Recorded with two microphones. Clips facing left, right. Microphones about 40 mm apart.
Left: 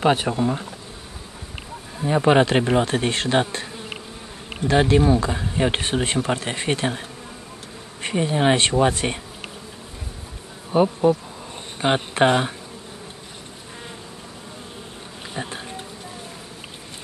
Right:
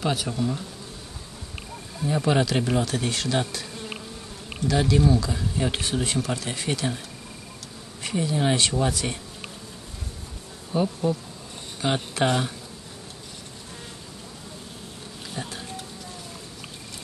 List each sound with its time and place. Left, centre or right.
0.0 s speech: left
2.0 s speech: left
3.7 s insect: centre
4.6 s speech: left
8.0 s speech: left
10.7 s speech: left
15.3 s insect: left